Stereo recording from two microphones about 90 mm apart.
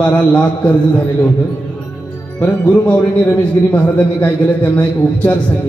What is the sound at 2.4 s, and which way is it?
A man's voice, 15° left (ahead or behind).